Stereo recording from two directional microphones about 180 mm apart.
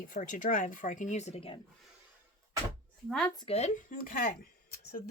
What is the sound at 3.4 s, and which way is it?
Speech, 35° left (ahead or behind).